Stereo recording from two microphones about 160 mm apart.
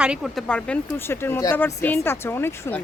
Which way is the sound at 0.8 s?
15° left (ahead or behind).